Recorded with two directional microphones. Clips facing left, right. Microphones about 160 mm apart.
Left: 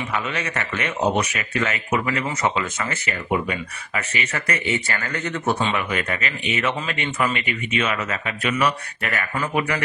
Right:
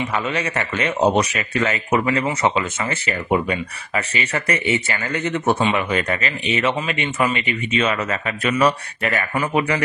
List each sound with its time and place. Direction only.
0.1 s a man's voice: 30° right (ahead or behind)
4.6 s a man's voice: 20° right (ahead or behind)
6.9 s speech: 20° right (ahead or behind)
7.7 s a man's voice: 35° right (ahead or behind)
9.0 s speech: 20° right (ahead or behind)
9.6 s a man's voice: 35° right (ahead or behind)